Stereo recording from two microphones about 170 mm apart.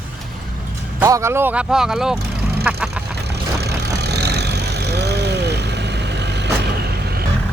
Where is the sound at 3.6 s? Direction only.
75° right (ahead or behind).